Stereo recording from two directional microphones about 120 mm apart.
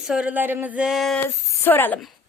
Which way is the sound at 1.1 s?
15° left (ahead or behind).